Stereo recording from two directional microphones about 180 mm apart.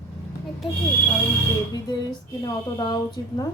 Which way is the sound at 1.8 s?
25° left (ahead or behind).